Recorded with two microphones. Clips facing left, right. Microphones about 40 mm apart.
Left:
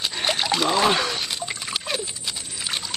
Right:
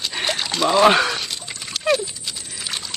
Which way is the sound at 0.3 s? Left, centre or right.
Centre.